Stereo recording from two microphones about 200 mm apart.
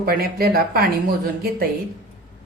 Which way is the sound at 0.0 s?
50° right (ahead or behind).